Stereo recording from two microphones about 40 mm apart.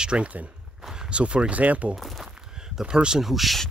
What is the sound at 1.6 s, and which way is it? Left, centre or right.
Speech, right.